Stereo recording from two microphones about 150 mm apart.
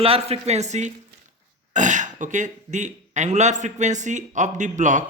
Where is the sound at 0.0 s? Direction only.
40° right (ahead or behind).